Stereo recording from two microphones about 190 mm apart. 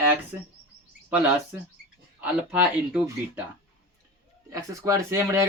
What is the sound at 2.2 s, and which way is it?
Speech, 5° right (ahead or behind).